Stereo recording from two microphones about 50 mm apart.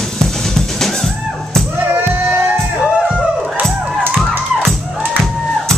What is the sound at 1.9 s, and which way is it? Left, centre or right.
Music, right.